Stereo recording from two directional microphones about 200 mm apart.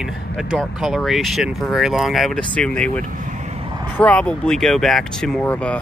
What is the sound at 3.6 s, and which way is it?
Vehicle, 25° right (ahead or behind).